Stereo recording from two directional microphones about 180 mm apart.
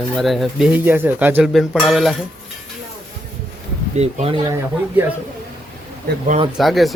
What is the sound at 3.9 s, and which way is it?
Speech, 35° right (ahead or behind).